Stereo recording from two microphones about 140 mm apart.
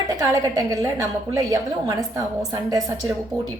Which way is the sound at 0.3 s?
25° right (ahead or behind).